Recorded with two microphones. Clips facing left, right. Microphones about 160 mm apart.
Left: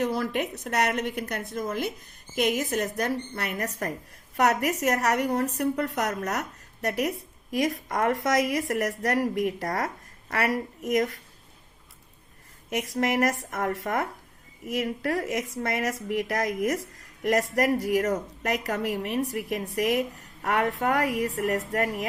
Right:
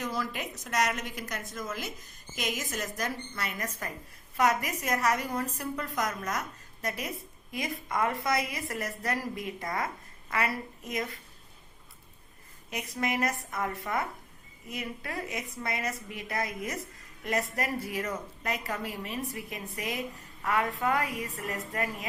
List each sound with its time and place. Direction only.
0.0 s a woman's voice: 60° left (ahead or behind)
13.0 s a woman's voice: 75° left (ahead or behind)